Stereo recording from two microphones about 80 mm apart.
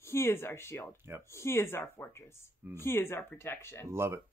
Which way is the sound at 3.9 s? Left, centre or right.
Right.